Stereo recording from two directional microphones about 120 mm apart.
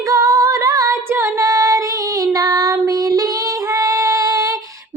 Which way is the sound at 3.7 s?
25° right (ahead or behind).